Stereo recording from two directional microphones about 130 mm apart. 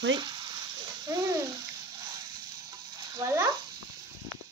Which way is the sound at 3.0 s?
30° right (ahead or behind).